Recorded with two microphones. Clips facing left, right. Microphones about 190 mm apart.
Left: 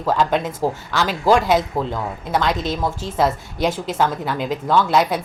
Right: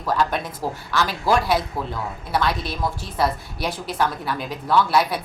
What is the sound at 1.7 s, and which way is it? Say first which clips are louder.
Speech: left 6 dB; 45° left (ahead or behind).